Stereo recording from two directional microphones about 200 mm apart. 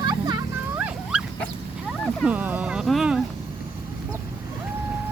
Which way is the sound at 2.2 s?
10° right (ahead or behind).